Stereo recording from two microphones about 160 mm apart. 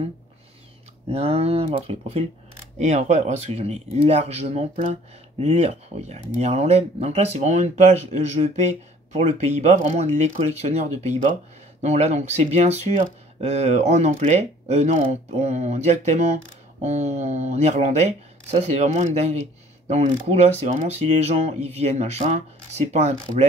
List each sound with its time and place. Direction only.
1.0 s speech: 40° right (ahead or behind)